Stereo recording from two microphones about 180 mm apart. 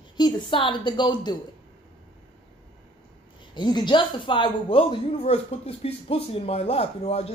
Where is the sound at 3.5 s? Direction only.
25° left (ahead or behind).